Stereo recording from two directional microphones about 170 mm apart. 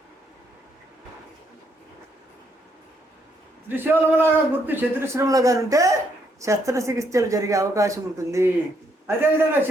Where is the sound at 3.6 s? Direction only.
10° right (ahead or behind).